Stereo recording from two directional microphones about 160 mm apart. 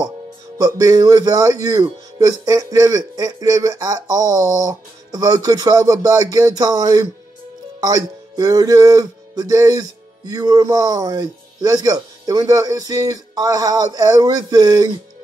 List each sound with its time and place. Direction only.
0.6 s speech: 25° right (ahead or behind)